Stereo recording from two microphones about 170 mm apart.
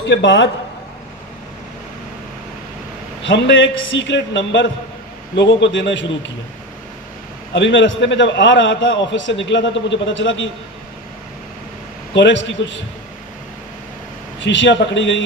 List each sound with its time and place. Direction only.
0.1 s a man's voice: 90° left
3.3 s a man's voice: 90° left
7.5 s a man's voice: 90° left
12.1 s a man's voice: 90° left
14.4 s a man's voice: 90° left